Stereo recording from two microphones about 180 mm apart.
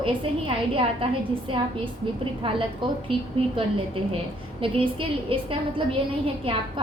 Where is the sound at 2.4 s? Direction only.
30° right (ahead or behind).